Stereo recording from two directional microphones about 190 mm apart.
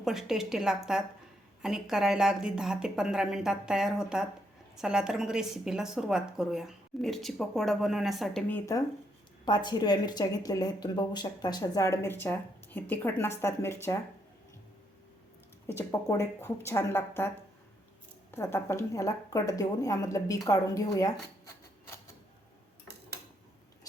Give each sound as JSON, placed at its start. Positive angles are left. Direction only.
{"t": 0.0, "sound": "a woman's voice", "side_deg": 0}
{"t": 15.6, "sound": "speech", "side_deg": 15}
{"t": 18.3, "sound": "a woman's voice", "side_deg": 15}